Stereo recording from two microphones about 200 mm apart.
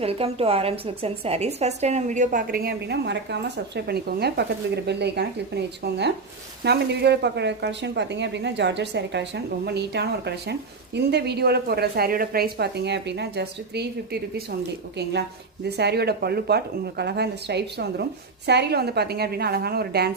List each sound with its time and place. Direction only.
0.0 s a woman's voice: 30° right (ahead or behind); by 5.3 s 55° right (ahead or behind)
6.7 s a woman's voice: 55° right (ahead or behind)
15.6 s a woman's voice: 55° right (ahead or behind)